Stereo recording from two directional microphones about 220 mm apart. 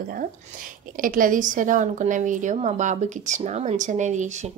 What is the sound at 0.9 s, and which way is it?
Speech, 40° right (ahead or behind).